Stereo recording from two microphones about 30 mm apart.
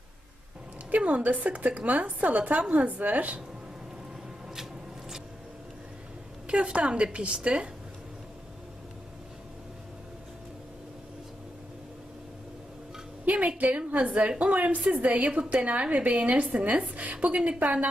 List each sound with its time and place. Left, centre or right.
0.9 s a woman's voice: right
6.5 s a woman's voice: right
13.2 s a sound: right
13.6 s a woman's voice: right